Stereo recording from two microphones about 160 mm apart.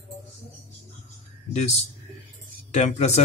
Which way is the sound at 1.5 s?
45° left (ahead or behind).